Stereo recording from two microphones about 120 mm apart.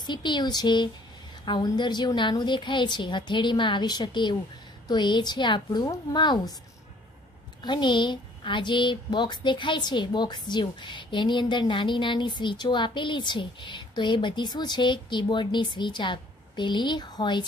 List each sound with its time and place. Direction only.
0.0 s a woman's voice: 40° left (ahead or behind)
7.6 s a woman's voice: 40° left (ahead or behind)